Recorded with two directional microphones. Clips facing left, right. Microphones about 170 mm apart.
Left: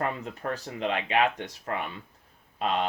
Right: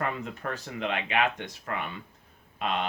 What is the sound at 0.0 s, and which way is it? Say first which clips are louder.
Speech: left 1 dB; 35° left (ahead or behind).